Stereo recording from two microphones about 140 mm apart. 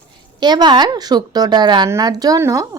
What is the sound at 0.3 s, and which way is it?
Speech, 30° right (ahead or behind).